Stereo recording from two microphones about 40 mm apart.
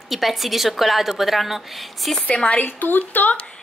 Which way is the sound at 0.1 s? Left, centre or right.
Centre.